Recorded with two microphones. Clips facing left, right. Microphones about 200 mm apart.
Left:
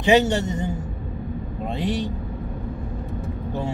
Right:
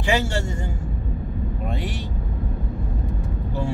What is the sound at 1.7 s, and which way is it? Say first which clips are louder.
Speech: left 9 dB; 20° left (ahead or behind).